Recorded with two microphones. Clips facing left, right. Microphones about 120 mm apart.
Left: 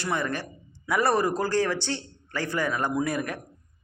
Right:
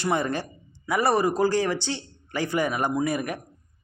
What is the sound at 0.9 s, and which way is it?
Speech, 5° right (ahead or behind).